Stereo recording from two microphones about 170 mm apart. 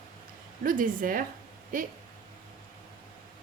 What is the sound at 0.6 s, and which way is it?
Speech, 50° right (ahead or behind).